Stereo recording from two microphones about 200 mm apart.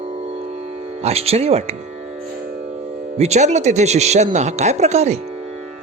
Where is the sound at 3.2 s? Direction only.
35° right (ahead or behind).